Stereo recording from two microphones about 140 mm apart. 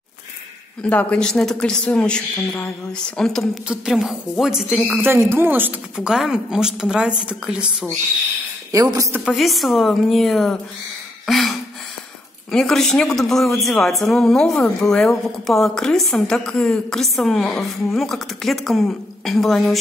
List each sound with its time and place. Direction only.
0.8 s a woman's voice: 10° left (ahead or behind); by 7.6 s 5° right (ahead or behind)
8.7 s a man's voice: 25° right (ahead or behind)
9.2 s a woman's voice: centre (ahead or behind)
11.2 s a sound: centre (ahead or behind)
12.4 s a woman's voice: 5° left (ahead or behind)